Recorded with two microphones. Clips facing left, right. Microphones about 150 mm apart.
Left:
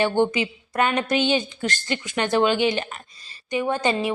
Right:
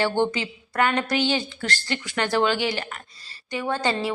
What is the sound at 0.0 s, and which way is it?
A woman's voice, 15° left (ahead or behind).